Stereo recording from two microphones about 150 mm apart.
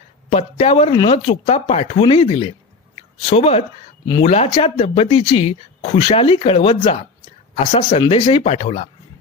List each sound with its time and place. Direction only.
0.3 s speech: 45° left (ahead or behind)